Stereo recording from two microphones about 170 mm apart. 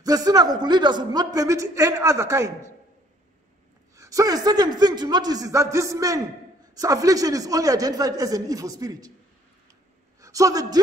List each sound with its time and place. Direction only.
0.0 s a man's voice: 20° right (ahead or behind)
3.9 s a man's voice: 20° right (ahead or behind)
10.2 s a man's voice: 20° right (ahead or behind)